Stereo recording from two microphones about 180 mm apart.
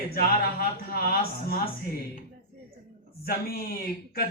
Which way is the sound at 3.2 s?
60° left (ahead or behind).